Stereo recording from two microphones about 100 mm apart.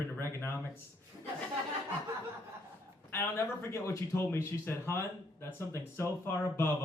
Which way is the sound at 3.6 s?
30° left (ahead or behind).